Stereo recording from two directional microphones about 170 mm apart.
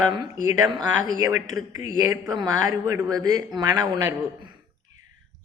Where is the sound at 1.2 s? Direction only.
15° right (ahead or behind).